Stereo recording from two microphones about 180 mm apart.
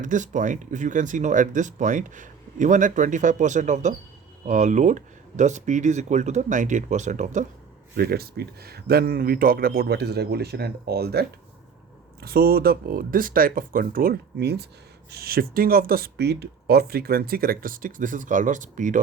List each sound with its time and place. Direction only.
0.0 s speech: 45° right (ahead or behind)
7.9 s speech: 60° right (ahead or behind)